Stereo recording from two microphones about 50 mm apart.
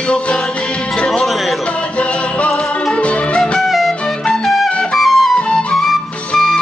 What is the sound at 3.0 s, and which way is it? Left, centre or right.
Music, left.